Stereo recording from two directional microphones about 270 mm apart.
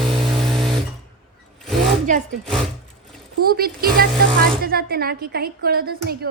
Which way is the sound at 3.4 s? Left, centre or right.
Right.